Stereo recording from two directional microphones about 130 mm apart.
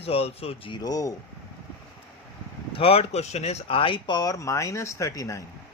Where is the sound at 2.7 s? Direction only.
45° left (ahead or behind).